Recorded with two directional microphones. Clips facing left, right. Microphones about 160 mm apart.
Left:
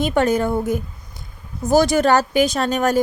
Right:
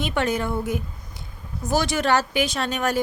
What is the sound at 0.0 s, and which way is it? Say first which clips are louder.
Speech: left 6 dB; 45° left (ahead or behind).